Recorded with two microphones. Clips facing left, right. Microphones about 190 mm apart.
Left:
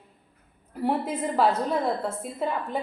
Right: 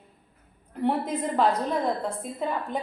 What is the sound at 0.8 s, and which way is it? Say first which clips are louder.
Speech: even; 5° left (ahead or behind).